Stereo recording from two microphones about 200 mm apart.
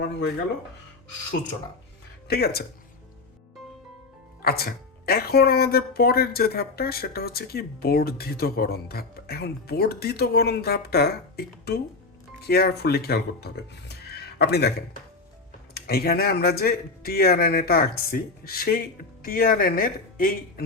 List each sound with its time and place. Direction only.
2.2 s speech: 50° left (ahead or behind)
4.4 s speech: 50° left (ahead or behind)
15.7 s speech: 50° left (ahead or behind)